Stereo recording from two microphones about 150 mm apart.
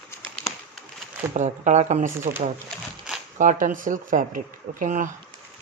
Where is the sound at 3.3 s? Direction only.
60° right (ahead or behind).